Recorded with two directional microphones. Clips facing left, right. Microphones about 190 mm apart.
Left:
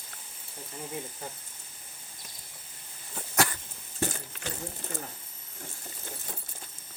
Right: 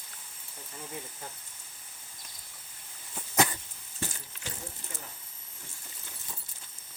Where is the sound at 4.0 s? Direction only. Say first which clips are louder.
Left 7 dB; 60° left (ahead or behind).